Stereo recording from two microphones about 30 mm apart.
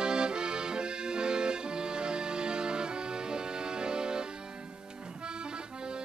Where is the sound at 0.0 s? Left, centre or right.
Right.